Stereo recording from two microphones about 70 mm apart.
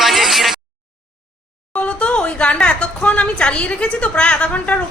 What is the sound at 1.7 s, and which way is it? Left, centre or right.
A woman's voice, centre.